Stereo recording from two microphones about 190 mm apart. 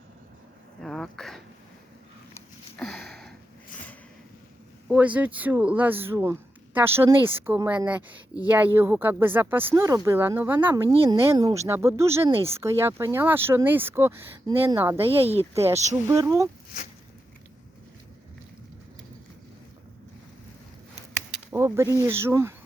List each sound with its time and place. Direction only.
0.8 s throat clearing: 5° left (ahead or behind)
2.3 s a sound: 5° left (ahead or behind)
4.9 s speech: 5° right (ahead or behind)
15.0 s speech: 30° right (ahead or behind)
15.5 s speech: 15° right (ahead or behind)
21.2 s speech: 15° right (ahead or behind)